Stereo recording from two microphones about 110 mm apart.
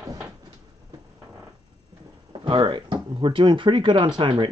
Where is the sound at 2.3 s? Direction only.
45° right (ahead or behind).